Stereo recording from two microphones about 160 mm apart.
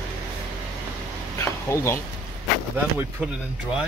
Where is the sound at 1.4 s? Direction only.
20° left (ahead or behind).